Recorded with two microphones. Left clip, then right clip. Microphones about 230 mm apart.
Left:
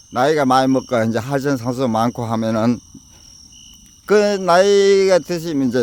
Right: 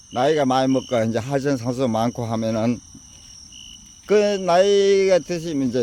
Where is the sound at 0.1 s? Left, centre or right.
Left.